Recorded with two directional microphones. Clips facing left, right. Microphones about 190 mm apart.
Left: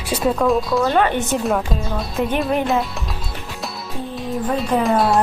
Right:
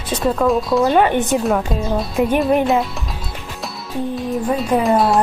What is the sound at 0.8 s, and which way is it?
Speech, 15° right (ahead or behind).